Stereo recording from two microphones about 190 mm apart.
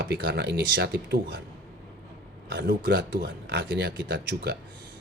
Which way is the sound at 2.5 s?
60° right (ahead or behind).